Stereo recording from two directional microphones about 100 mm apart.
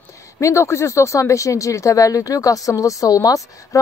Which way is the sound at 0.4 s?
30° left (ahead or behind).